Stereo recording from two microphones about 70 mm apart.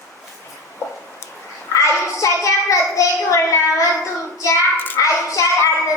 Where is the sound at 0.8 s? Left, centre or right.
Left.